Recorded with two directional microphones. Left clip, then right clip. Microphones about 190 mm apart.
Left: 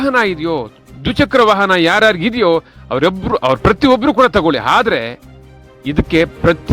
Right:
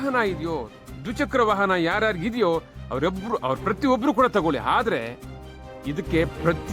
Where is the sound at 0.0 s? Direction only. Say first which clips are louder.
Left 10 dB; 20° left (ahead or behind).